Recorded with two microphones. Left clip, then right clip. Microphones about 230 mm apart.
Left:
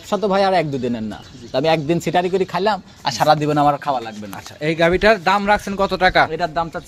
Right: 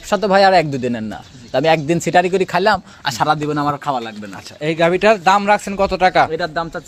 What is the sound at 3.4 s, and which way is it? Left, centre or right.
Speech, centre.